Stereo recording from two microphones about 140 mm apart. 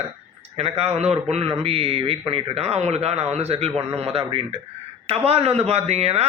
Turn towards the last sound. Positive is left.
turn(degrees=-50)  # may be behind; listen again after turning